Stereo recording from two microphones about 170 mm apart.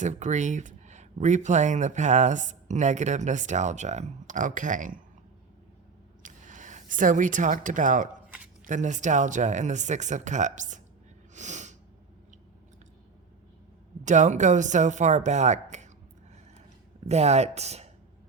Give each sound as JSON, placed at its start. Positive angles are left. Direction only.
{"t": 0.0, "sound": "speech", "side_deg": -45}
{"t": 6.2, "sound": "speech", "side_deg": -50}
{"t": 11.3, "sound": "sneeze", "side_deg": -45}
{"t": 14.0, "sound": "speech", "side_deg": -45}
{"t": 17.1, "sound": "speech", "side_deg": -40}